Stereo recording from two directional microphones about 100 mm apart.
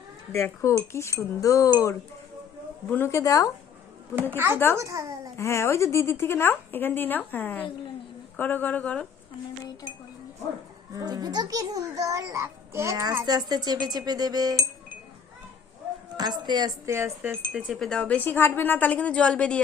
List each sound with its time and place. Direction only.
0.3 s a woman's voice: 25° left (ahead or behind)
1.4 s a sound: 35° left (ahead or behind)
4.1 s speech: 20° right (ahead or behind)
4.8 s a child's voice: 35° right (ahead or behind)
5.4 s a woman's voice: 30° left (ahead or behind)
10.9 s a child's voice: 40° right (ahead or behind)
16.1 s speech: 45° right (ahead or behind)
17.7 s a woman's voice: 5° left (ahead or behind)